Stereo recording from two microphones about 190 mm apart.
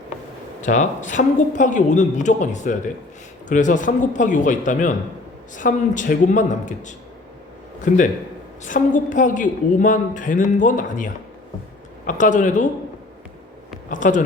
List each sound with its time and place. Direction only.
0.6 s a woman's voice: 40° left (ahead or behind)
13.9 s a woman's voice: 45° left (ahead or behind)